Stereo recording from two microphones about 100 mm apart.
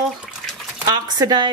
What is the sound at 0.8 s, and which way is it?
Speech, 45° right (ahead or behind).